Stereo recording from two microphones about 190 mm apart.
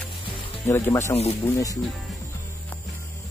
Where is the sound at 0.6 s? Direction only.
15° left (ahead or behind).